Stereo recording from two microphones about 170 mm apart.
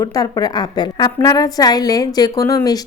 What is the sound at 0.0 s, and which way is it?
A woman's voice, 20° left (ahead or behind).